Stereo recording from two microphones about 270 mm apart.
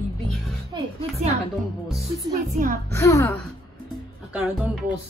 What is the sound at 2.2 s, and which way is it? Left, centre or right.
Speech, right.